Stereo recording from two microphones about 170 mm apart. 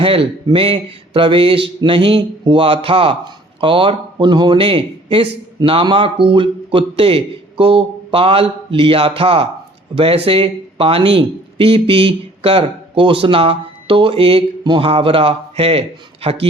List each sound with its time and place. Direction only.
0.0 s speech: 30° right (ahead or behind)